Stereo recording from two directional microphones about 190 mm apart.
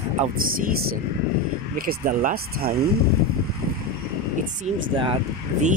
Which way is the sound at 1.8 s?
50° right (ahead or behind).